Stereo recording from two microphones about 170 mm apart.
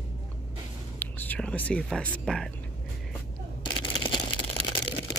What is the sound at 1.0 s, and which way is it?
Speech, 10° left (ahead or behind).